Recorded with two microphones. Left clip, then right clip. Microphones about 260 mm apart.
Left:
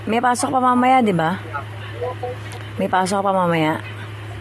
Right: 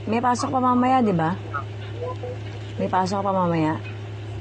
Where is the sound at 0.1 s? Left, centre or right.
Left.